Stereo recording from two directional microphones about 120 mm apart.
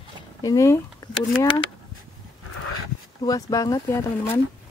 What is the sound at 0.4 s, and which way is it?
Speech, 30° left (ahead or behind).